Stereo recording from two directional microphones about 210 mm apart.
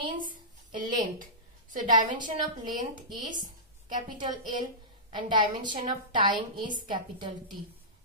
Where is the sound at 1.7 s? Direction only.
35° right (ahead or behind).